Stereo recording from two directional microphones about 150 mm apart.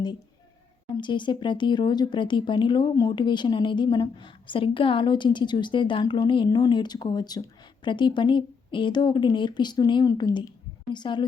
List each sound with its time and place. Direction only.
0.9 s speech: 30° left (ahead or behind)